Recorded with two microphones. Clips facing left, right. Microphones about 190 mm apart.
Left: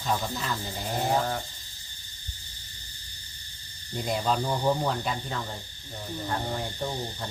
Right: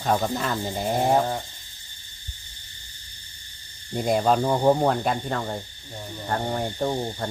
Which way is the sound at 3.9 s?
50° right (ahead or behind).